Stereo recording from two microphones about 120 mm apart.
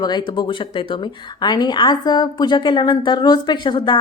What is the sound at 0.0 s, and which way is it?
Speech, 35° left (ahead or behind).